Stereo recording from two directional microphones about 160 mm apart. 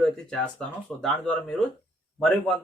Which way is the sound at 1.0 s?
5° left (ahead or behind).